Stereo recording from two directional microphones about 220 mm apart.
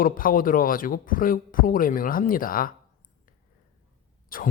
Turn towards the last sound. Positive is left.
turn(degrees=40)  # may be behind; listen again after turning